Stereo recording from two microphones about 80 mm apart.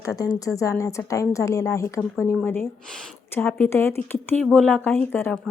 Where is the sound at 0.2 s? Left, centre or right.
Left.